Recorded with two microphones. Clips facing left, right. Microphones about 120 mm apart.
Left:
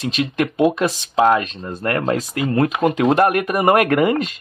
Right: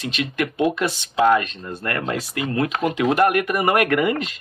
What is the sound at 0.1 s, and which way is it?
Speech, 35° left (ahead or behind).